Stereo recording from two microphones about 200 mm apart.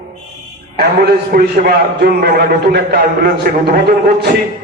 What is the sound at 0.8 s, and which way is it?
A man's voice, 50° right (ahead or behind).